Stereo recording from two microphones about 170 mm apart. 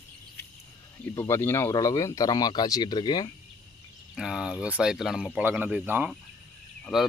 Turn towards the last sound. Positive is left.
turn(degrees=0)  # may be behind; listen again after turning